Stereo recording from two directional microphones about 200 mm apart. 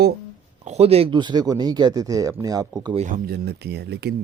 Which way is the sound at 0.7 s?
30° right (ahead or behind).